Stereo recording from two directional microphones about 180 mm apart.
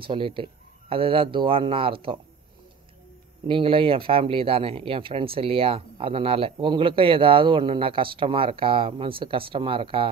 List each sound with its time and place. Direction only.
0.0 s speech: 30° right (ahead or behind)
3.4 s speech: 30° right (ahead or behind)